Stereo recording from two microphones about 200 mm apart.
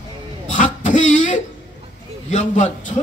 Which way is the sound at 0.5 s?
40° left (ahead or behind).